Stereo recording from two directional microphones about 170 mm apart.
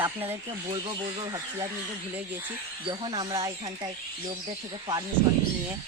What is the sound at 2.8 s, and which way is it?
Speech, 30° right (ahead or behind).